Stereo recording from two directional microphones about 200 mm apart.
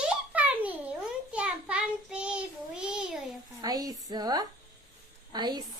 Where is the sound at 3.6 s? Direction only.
20° right (ahead or behind).